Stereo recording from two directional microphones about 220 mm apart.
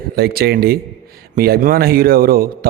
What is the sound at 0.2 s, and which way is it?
A man's voice, 45° right (ahead or behind).